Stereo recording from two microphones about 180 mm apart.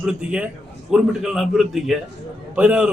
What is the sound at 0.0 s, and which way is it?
A man's voice, 5° right (ahead or behind).